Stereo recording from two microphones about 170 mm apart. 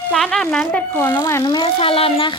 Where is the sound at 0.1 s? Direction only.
5° left (ahead or behind).